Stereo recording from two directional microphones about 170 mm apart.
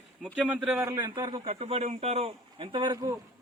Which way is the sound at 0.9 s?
25° right (ahead or behind).